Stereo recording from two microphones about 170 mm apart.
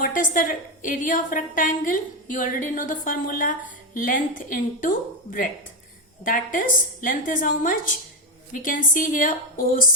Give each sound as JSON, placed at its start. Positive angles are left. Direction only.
{"t": 0.0, "sound": "a woman's voice", "side_deg": 50}